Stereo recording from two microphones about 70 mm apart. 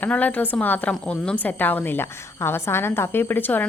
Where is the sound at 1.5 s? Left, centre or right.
Left.